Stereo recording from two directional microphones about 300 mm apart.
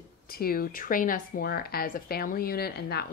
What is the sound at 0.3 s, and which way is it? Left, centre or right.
A woman's voice, left.